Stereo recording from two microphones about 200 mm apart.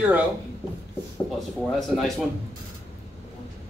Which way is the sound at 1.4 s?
Centre (ahead or behind).